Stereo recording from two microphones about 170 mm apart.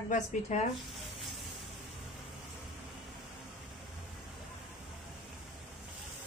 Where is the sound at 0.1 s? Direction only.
45° left (ahead or behind).